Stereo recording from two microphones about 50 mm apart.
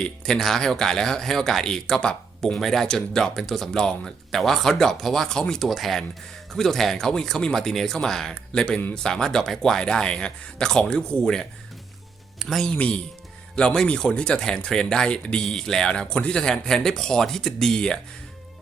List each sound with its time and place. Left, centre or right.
0.0 s speech: centre
5.6 s speech: centre
12.4 s speech: centre
12.7 s speech: left
13.6 s speech: centre